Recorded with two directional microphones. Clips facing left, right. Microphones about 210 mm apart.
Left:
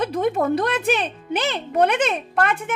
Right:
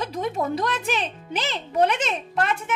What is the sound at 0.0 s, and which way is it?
Speech, 60° left (ahead or behind).